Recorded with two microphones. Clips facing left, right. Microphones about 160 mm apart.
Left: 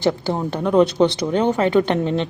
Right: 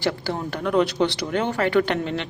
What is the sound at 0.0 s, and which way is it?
A woman's voice, 20° left (ahead or behind).